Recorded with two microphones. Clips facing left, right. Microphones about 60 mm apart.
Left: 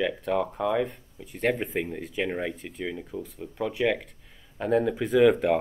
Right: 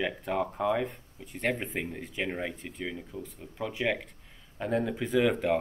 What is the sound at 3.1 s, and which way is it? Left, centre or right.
Speech, centre.